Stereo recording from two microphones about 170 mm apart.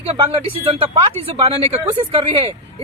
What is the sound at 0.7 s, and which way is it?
Speech, 35° right (ahead or behind).